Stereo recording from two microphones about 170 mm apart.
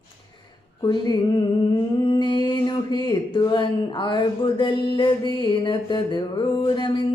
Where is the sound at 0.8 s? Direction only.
25° left (ahead or behind).